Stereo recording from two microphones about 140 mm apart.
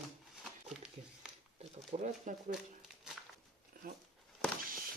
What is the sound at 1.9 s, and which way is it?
Speech, 60° right (ahead or behind).